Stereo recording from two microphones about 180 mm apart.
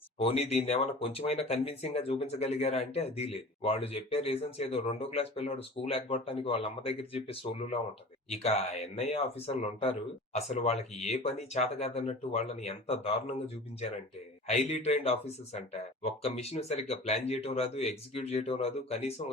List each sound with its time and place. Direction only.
0.2 s speech: 35° left (ahead or behind)
14.4 s speech: 35° left (ahead or behind)